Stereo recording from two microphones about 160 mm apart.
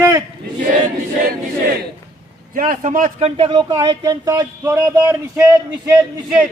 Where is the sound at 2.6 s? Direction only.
55° right (ahead or behind); by 5.1 s 15° right (ahead or behind).